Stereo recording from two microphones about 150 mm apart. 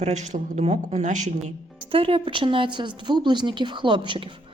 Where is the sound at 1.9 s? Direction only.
35° right (ahead or behind).